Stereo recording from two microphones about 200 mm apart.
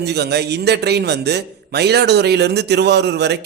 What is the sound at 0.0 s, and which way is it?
A man's voice, 55° right (ahead or behind).